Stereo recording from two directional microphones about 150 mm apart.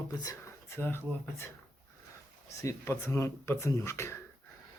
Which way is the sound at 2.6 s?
15° left (ahead or behind).